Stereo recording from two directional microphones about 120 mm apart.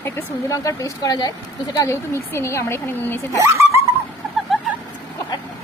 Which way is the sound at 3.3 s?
25° right (ahead or behind).